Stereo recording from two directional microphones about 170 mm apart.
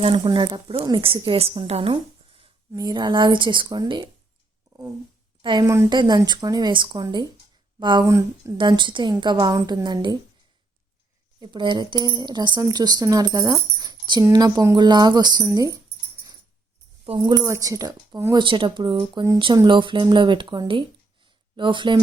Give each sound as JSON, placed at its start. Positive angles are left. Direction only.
{"t": 0.0, "sound": "speech", "side_deg": -30}
{"t": 2.7, "sound": "speech", "side_deg": -25}
{"t": 5.4, "sound": "speech", "side_deg": -25}
{"t": 11.3, "sound": "speech", "side_deg": -25}
{"t": 17.1, "sound": "speech", "side_deg": -25}